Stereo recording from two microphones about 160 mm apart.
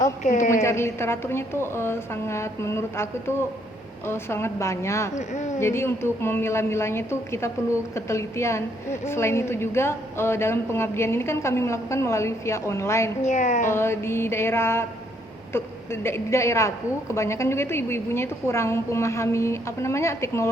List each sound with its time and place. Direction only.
0.2 s speech: 50° left (ahead or behind)
0.6 s a woman's voice: 15° left (ahead or behind)
5.1 s speech: 45° left (ahead or behind)
5.5 s a woman's voice: 15° left (ahead or behind)
13.2 s speech: 50° left (ahead or behind)
13.7 s a woman's voice: 15° left (ahead or behind)